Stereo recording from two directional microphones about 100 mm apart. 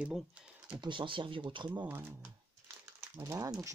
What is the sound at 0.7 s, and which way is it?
Speech, 55° right (ahead or behind).